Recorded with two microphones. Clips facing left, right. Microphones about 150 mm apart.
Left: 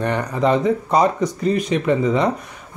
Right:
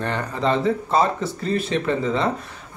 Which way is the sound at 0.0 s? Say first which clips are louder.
Left 4 dB; 15° left (ahead or behind).